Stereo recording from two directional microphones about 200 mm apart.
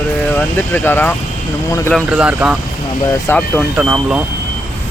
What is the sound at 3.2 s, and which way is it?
Speech, 10° left (ahead or behind).